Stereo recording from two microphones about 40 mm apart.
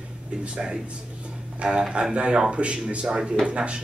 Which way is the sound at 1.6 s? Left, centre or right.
Right.